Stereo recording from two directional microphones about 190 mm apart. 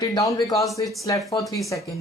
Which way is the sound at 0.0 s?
15° left (ahead or behind).